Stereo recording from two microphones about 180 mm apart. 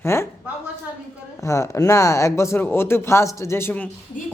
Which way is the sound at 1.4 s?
15° left (ahead or behind).